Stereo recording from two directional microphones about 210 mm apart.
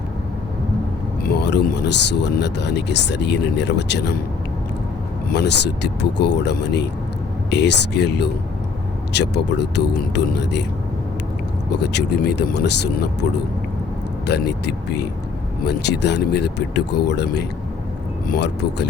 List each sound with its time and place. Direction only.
1.2 s speech: 50° left (ahead or behind)
5.3 s speech: 55° left (ahead or behind)
11.7 s speech: 55° left (ahead or behind)
14.3 s speech: 50° left (ahead or behind)